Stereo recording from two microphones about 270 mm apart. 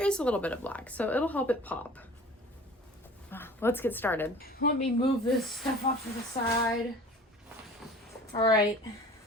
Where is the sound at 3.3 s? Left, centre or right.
Centre.